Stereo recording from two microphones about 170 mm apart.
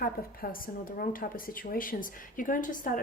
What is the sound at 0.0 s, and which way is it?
A woman's voice, 55° left (ahead or behind).